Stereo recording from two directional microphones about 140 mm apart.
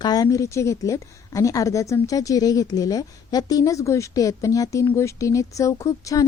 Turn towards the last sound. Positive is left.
turn(degrees=25)  # may be behind; listen again after turning